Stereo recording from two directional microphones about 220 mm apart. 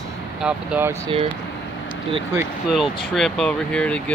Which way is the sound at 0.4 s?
5° right (ahead or behind).